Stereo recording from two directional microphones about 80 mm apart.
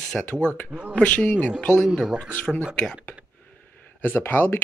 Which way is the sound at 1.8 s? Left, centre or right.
Centre.